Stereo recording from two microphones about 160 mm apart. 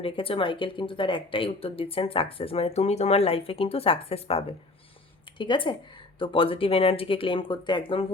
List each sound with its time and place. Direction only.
0.0 s speech: 35° left (ahead or behind)